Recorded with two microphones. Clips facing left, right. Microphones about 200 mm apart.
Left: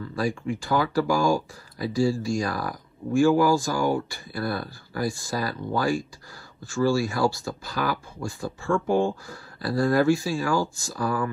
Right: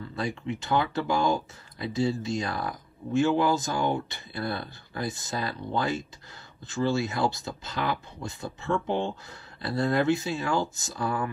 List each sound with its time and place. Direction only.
0.1 s speech: 20° right (ahead or behind)